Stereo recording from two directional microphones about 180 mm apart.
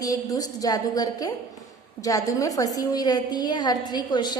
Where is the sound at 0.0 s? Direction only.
20° left (ahead or behind).